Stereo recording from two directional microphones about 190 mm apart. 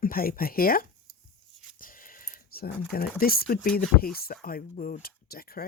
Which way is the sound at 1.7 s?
45° left (ahead or behind).